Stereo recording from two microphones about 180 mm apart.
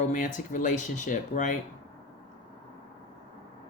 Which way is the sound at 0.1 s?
45° left (ahead or behind).